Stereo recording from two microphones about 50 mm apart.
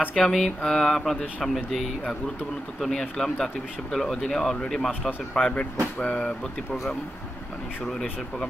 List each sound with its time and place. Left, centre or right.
0.1 s speech: centre
5.4 s speech: left
5.9 s speech: centre
7.8 s speech: centre